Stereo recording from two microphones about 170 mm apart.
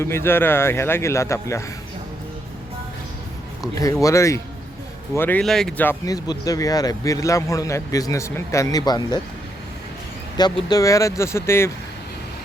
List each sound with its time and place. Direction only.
0.0 s a man's voice: 15° left (ahead or behind)
3.6 s a man's voice: 20° left (ahead or behind)
10.3 s a man's voice: 25° left (ahead or behind)